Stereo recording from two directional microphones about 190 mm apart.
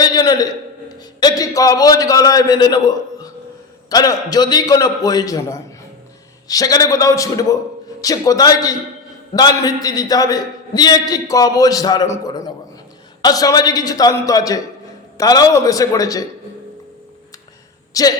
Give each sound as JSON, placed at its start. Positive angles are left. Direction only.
{"t": 0.0, "sound": "a sound", "side_deg": 20}
{"t": 0.9, "sound": "a man's voice", "side_deg": 20}
{"t": 18.0, "sound": "a man's voice", "side_deg": 20}